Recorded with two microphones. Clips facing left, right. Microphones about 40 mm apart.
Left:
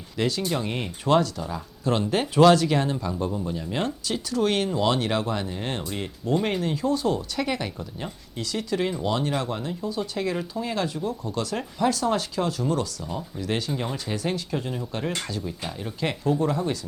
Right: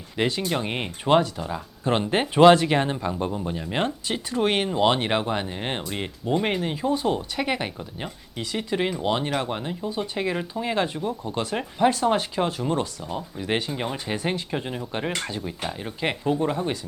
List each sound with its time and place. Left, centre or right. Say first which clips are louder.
0.2 s speech: right 1 dB; right